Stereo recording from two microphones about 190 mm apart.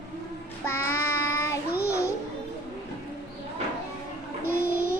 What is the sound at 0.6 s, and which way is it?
Child singing, 15° left (ahead or behind).